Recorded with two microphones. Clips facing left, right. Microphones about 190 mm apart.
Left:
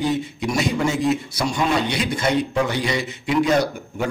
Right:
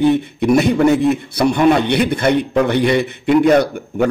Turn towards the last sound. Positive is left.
turn(degrees=-60)  # may be behind; listen again after turning